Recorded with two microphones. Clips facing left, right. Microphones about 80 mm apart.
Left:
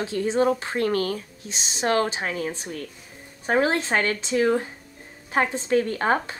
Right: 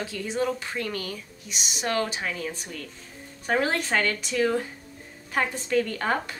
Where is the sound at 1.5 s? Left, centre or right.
Left.